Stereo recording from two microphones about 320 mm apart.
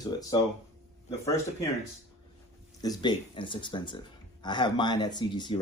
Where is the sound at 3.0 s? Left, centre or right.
Centre.